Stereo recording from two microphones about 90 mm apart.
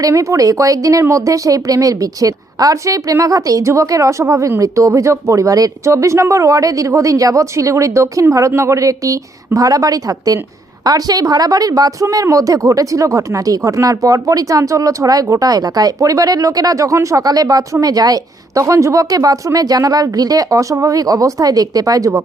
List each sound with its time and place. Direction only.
0.0 s a woman's voice: 35° right (ahead or behind)